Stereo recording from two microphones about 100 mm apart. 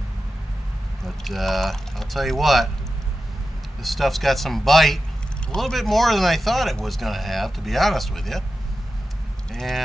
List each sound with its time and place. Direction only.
1.0 s speech: centre (ahead or behind)
3.8 s speech: centre (ahead or behind)
9.5 s speech: 5° left (ahead or behind)